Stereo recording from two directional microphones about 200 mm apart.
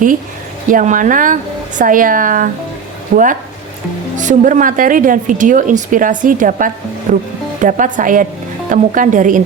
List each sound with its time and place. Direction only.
0.7 s a woman's voice: 40° right (ahead or behind)